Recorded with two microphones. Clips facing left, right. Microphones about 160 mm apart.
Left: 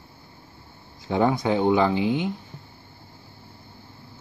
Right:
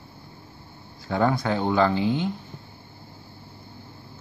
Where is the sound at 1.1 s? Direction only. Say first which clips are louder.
Left 2 dB; 20° left (ahead or behind).